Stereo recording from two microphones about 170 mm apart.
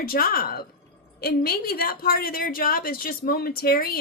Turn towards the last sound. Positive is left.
turn(degrees=65)  # may be behind; listen again after turning